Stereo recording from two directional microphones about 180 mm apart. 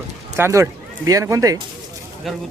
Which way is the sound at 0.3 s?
15° right (ahead or behind).